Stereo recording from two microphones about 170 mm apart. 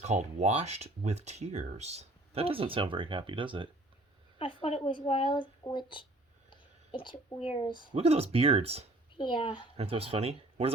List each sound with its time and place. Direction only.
0.0 s speech: 45° right (ahead or behind)
4.4 s a woman's voice: 35° left (ahead or behind)
7.9 s speech: 35° right (ahead or behind)
9.1 s a woman's voice: 30° left (ahead or behind)
9.7 s speech: 35° right (ahead or behind)